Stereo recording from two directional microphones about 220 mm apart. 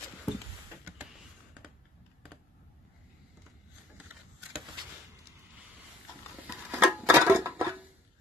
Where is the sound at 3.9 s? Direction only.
5° right (ahead or behind).